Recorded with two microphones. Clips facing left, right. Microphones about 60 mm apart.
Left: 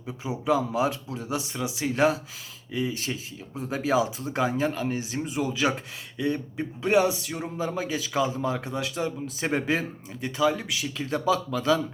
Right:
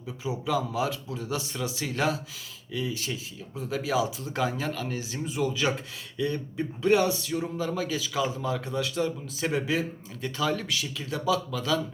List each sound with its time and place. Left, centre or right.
0.0 s speech: left
1.9 s speech: left
10.2 s speech: centre
10.9 s speech: left